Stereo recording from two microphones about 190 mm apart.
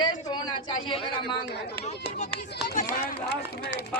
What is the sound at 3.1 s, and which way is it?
Speech, 60° left (ahead or behind).